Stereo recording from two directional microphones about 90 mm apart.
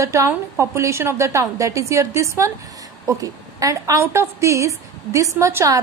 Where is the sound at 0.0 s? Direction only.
35° right (ahead or behind).